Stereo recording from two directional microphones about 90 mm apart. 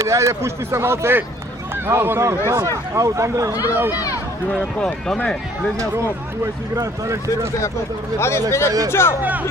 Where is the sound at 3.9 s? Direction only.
40° left (ahead or behind).